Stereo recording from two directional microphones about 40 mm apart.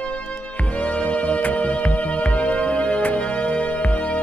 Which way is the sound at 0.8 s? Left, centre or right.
Left.